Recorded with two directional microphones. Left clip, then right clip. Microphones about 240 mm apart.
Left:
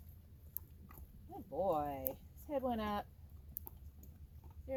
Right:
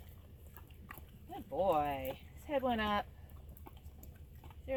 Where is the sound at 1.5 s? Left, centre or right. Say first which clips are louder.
Right 4 dB; centre.